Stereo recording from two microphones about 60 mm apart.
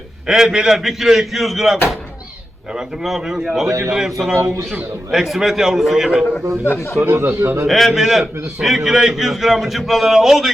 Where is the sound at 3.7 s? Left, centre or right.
Right.